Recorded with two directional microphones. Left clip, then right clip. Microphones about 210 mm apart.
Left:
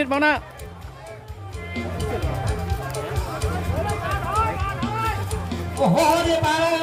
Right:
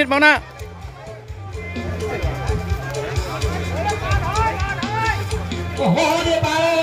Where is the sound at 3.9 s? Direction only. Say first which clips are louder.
Right 4 dB; 35° left (ahead or behind).